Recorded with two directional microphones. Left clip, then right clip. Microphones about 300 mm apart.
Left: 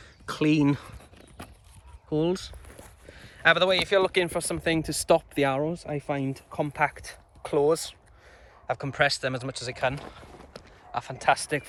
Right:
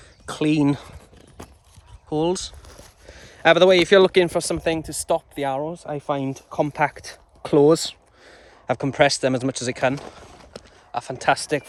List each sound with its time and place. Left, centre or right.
0.0 s a sound: centre
2.0 s speech: centre; by 4.6 s right
4.6 s speech: centre
11.2 s speech: right